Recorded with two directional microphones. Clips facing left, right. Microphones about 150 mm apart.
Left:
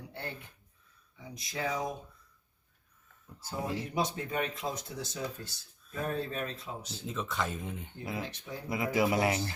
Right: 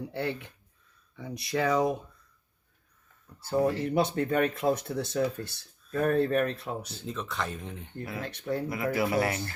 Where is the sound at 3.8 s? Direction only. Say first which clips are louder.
Right 7 dB; 60° right (ahead or behind).